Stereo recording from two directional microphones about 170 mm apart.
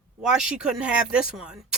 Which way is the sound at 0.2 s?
5° right (ahead or behind).